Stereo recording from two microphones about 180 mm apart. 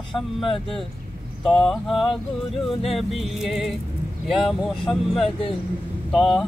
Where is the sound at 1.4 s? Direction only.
Centre (ahead or behind).